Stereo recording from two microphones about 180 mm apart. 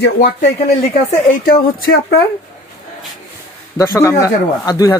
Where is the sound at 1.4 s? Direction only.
55° left (ahead or behind).